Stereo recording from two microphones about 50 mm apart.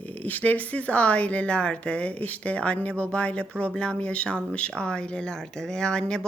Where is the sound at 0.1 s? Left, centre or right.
Left.